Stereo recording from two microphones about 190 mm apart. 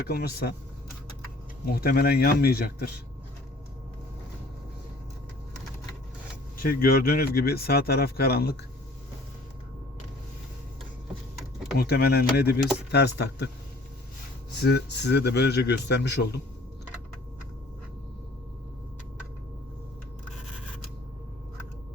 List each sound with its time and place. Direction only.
0.1 s a man's voice: 55° left (ahead or behind)
1.6 s speech: 50° left (ahead or behind)
6.6 s speech: 50° left (ahead or behind)
11.8 s a man's voice: 55° left (ahead or behind)
14.6 s a man's voice: 60° left (ahead or behind)